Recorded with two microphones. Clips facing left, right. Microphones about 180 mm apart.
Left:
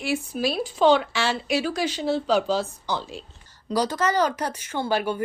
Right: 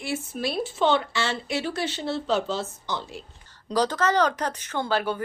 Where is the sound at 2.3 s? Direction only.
25° right (ahead or behind).